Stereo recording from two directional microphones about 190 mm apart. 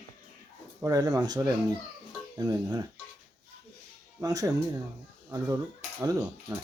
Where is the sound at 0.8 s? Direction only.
20° right (ahead or behind).